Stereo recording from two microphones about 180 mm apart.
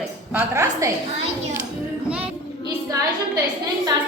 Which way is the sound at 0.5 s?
15° right (ahead or behind).